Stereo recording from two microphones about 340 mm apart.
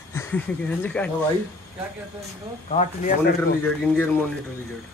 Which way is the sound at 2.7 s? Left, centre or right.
Centre.